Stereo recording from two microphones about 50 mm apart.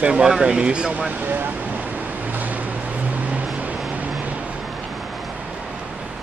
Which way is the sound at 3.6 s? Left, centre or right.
Right.